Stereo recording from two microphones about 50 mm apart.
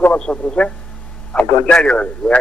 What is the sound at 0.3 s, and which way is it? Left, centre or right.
Speech, left.